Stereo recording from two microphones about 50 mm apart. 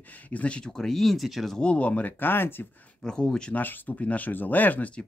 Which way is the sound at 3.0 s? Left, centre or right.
Centre.